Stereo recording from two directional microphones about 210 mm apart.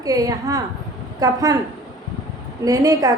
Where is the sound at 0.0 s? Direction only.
15° right (ahead or behind).